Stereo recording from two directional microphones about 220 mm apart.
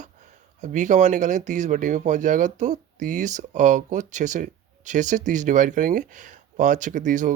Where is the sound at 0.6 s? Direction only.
35° right (ahead or behind).